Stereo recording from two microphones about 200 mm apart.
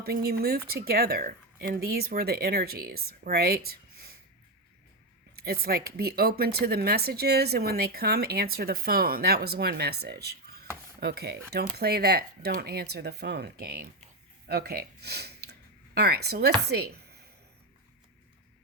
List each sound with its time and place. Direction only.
0.0 s speech: 50° right (ahead or behind)
5.4 s speech: 50° right (ahead or behind)
10.0 s a sound: 55° right (ahead or behind)
11.0 s speech: 50° right (ahead or behind)